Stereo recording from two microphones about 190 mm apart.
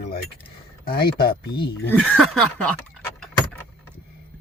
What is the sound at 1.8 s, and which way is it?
Speech, 5° left (ahead or behind).